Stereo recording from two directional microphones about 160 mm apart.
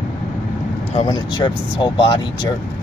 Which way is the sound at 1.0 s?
25° left (ahead or behind).